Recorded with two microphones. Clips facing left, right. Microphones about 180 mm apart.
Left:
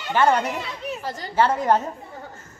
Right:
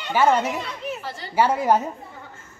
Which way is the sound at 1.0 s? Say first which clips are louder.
Left 3 dB; 40° left (ahead or behind).